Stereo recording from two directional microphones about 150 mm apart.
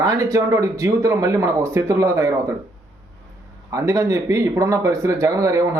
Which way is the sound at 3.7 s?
20° right (ahead or behind).